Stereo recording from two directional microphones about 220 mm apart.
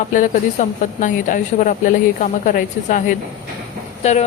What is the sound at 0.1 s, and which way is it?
Speech, 35° left (ahead or behind).